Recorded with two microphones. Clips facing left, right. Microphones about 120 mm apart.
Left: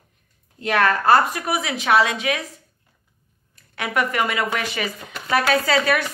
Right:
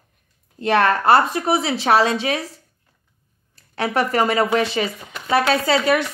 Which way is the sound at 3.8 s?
35° right (ahead or behind).